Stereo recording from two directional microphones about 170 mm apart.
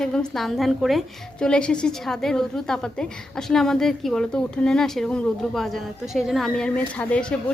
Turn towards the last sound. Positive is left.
turn(degrees=5)  # may be behind; listen again after turning